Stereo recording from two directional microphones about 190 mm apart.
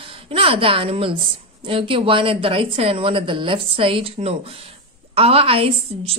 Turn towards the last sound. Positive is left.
turn(degrees=-30)  # may be behind; listen again after turning